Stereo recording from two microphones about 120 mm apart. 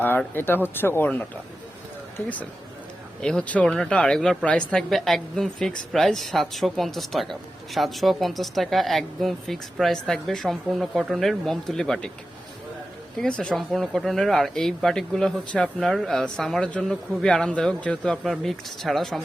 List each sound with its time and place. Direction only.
0.3 s speech: 15° left (ahead or behind)
2.1 s a woman's voice: 15° left (ahead or behind)
13.1 s a woman's voice: 10° left (ahead or behind)